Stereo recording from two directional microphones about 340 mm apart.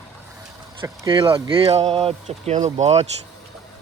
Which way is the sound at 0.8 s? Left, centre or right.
Centre.